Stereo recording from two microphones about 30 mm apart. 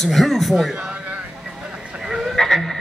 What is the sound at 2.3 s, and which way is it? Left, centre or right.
Music, centre.